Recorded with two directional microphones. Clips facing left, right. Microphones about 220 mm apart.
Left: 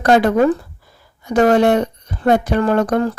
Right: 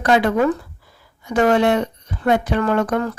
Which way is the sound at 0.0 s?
40° left (ahead or behind).